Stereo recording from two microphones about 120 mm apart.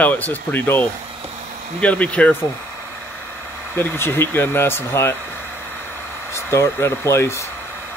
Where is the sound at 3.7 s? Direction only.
20° left (ahead or behind).